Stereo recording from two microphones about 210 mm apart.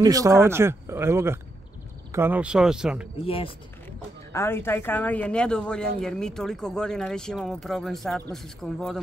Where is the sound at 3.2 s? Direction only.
25° left (ahead or behind).